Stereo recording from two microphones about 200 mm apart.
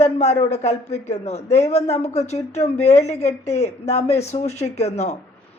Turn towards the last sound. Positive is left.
turn(degrees=30)  # may be behind; listen again after turning